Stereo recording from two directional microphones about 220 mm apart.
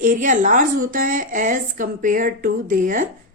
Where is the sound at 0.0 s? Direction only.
40° right (ahead or behind).